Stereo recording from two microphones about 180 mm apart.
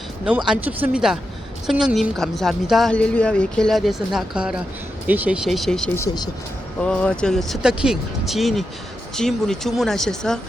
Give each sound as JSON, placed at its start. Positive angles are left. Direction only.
{"t": 0.3, "sound": "a woman's voice", "side_deg": -5}
{"t": 6.0, "sound": "speech", "side_deg": 20}
{"t": 6.8, "sound": "a woman's voice", "side_deg": 5}